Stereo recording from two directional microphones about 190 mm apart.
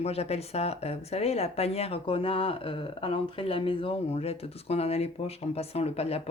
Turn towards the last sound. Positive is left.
turn(degrees=30)  # may be behind; listen again after turning